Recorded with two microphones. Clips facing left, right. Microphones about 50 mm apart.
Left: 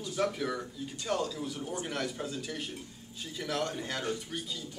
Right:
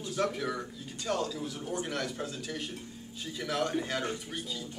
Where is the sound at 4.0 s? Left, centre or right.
Centre.